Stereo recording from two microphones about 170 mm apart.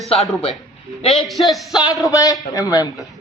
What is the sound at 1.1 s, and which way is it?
Speech, centre (ahead or behind).